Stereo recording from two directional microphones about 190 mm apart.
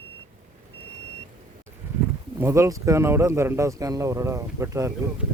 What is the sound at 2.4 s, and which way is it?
Speech, 15° right (ahead or behind).